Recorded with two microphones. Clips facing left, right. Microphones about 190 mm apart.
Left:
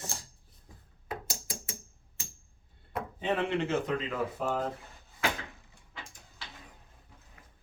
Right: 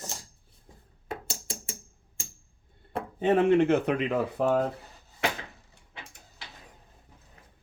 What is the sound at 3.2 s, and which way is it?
Speech, 50° right (ahead or behind).